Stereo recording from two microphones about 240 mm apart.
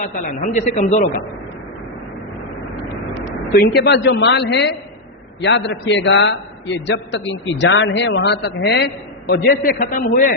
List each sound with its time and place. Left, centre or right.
0.0 s a man's voice: left
3.5 s a man's voice: left